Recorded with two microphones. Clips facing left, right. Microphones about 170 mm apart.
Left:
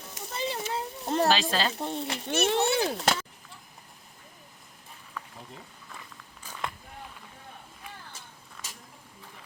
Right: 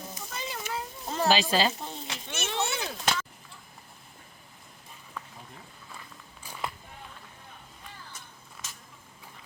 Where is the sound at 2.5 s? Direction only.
55° left (ahead or behind).